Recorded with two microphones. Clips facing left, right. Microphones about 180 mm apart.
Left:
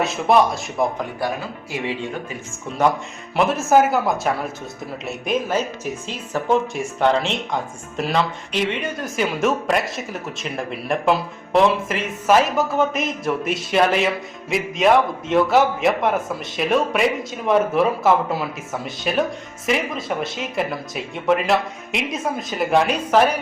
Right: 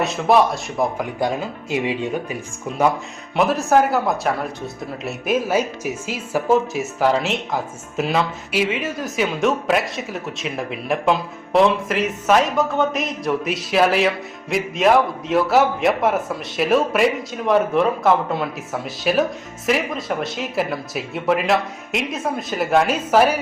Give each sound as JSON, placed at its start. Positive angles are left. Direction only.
{"t": 0.0, "sound": "speech", "side_deg": 0}
{"t": 1.2, "sound": "speech", "side_deg": -20}
{"t": 3.3, "sound": "speech", "side_deg": 0}